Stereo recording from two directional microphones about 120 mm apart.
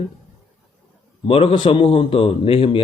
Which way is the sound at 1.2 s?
50° left (ahead or behind).